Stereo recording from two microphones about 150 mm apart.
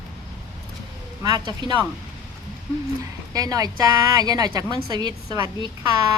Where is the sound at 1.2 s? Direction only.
30° right (ahead or behind).